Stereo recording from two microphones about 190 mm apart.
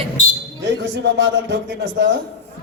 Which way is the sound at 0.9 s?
65° right (ahead or behind).